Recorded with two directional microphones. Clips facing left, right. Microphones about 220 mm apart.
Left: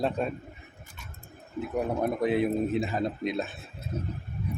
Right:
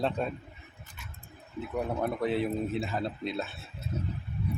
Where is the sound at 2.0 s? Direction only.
15° left (ahead or behind).